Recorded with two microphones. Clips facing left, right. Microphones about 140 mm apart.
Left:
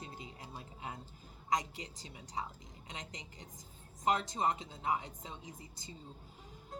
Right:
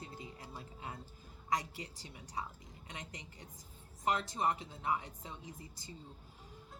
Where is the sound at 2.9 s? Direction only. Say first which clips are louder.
Left 1 dB; 20° left (ahead or behind).